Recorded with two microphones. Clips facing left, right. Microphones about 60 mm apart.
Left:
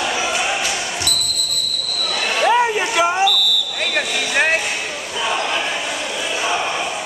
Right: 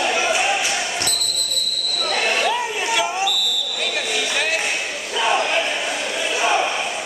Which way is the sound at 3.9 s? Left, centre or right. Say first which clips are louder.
Left 5 dB; left.